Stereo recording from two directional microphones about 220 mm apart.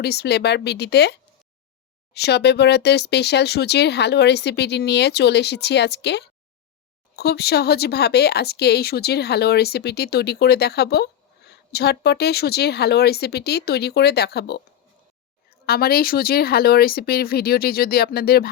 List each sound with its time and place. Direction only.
0.0 s speech: 45° left (ahead or behind)
15.6 s speech: 45° left (ahead or behind)